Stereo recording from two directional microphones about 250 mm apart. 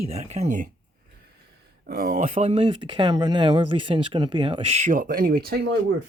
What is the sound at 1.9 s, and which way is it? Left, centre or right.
Speech, right.